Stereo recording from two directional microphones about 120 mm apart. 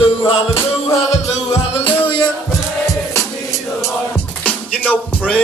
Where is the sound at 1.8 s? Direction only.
45° left (ahead or behind).